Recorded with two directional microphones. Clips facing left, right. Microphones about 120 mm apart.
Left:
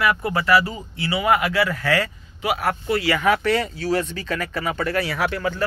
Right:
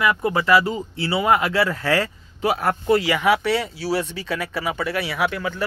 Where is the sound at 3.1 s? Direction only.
10° right (ahead or behind).